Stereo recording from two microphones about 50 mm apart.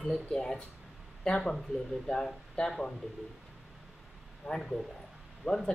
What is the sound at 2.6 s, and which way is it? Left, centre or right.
Speech, left.